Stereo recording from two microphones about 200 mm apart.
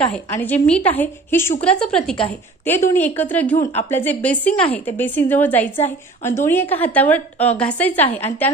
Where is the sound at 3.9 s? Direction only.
10° left (ahead or behind).